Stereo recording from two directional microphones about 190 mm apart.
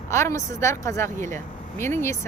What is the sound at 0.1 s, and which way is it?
A woman's voice, 15° left (ahead or behind).